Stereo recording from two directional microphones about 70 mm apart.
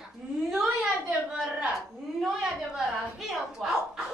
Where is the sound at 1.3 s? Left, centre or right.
Centre.